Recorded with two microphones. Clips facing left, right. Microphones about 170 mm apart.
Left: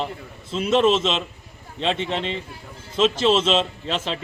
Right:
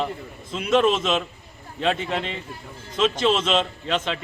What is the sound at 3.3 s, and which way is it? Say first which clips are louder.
Speech: left 2 dB; 30° left (ahead or behind).